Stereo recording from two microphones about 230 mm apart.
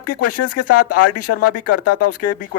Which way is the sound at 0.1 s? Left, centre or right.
Left.